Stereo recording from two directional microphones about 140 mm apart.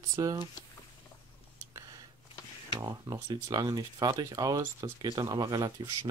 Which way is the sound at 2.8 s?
25° right (ahead or behind).